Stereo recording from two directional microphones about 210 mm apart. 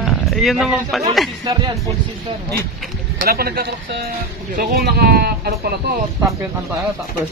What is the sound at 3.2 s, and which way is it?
Speech, 45° right (ahead or behind).